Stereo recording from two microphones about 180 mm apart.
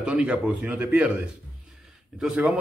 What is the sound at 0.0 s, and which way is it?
A man's voice, 5° right (ahead or behind).